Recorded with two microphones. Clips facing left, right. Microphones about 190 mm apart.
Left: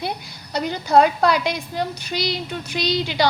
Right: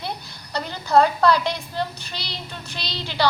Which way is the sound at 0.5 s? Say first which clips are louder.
Left 2 dB; 15° left (ahead or behind).